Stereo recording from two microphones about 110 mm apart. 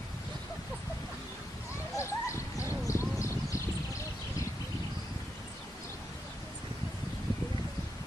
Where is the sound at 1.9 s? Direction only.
25° left (ahead or behind).